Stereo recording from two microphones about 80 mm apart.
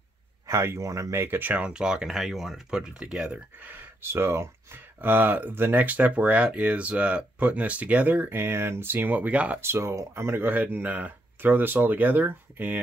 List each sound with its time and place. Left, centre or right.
0.5 s speech: right
1.2 s speech: right
1.7 s speech: centre
3.5 s speech: right
9.6 s speech: right